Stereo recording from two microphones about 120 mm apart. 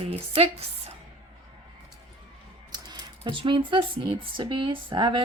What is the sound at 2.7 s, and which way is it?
Speech, 35° right (ahead or behind).